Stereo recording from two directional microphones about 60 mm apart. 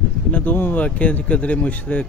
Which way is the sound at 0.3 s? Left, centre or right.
Left.